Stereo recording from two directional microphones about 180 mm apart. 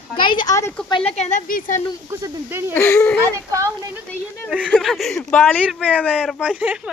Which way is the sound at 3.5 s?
15° right (ahead or behind).